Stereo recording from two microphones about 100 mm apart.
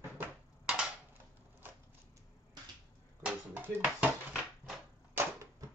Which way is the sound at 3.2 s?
20° right (ahead or behind).